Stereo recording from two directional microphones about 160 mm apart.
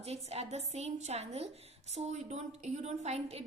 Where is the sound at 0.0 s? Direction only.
40° right (ahead or behind).